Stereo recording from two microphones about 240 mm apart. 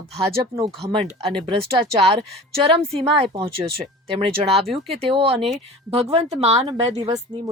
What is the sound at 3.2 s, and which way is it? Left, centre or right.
Speech, right.